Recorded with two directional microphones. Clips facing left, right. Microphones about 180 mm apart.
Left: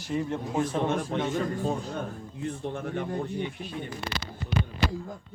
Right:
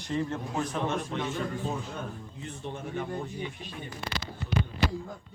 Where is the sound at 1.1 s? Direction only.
55° left (ahead or behind).